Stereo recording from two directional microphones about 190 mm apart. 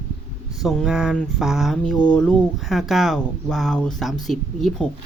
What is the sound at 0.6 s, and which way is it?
Speech, centre (ahead or behind).